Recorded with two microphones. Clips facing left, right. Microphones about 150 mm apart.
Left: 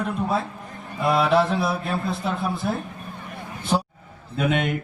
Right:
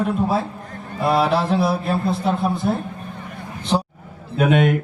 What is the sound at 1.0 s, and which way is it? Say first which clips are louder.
Speech: right 1 dB; 30° right (ahead or behind).